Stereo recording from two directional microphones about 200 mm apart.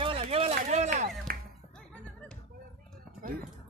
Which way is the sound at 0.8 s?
45° right (ahead or behind).